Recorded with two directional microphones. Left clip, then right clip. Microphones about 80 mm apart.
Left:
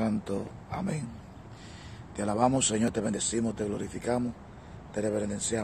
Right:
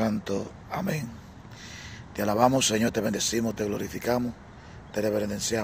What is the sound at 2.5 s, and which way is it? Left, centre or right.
Speech, centre.